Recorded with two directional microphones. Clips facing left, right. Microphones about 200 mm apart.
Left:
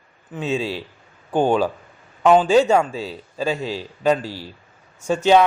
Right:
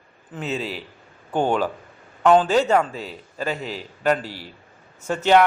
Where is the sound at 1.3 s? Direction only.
15° left (ahead or behind).